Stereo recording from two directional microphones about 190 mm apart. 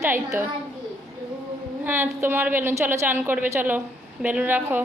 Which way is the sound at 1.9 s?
10° right (ahead or behind).